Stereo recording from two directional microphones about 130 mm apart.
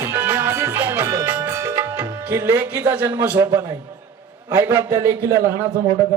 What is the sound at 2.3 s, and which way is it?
Speech, 15° right (ahead or behind).